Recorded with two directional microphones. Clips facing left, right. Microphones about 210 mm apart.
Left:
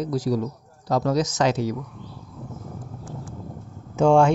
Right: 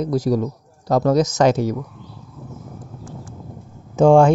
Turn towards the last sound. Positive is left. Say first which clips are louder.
# right 5 dB
turn(degrees=-35)  # may be behind; listen again after turning